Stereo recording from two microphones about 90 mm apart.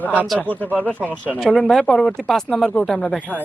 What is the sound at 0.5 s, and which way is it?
Speech, 20° left (ahead or behind).